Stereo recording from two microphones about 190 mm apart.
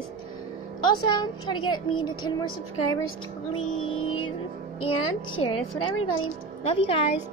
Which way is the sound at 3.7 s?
90° left.